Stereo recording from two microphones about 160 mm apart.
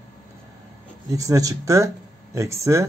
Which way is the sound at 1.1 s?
20° right (ahead or behind).